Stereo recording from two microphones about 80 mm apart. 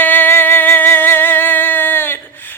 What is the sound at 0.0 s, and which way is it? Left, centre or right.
Music, left.